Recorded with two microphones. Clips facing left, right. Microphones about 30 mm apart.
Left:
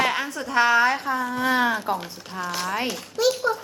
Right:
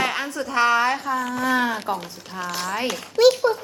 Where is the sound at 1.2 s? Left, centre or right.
Right.